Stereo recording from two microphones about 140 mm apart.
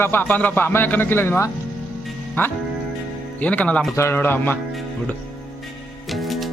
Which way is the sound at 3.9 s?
15° left (ahead or behind).